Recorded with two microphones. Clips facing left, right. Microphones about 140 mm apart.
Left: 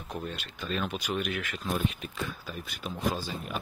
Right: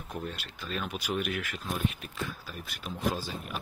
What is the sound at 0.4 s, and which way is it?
Speech, 5° right (ahead or behind).